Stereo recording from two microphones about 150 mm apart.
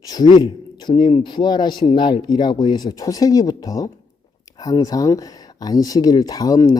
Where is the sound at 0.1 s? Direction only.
30° left (ahead or behind).